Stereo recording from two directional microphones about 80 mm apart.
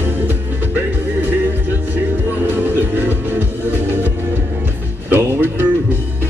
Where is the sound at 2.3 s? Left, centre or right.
Right.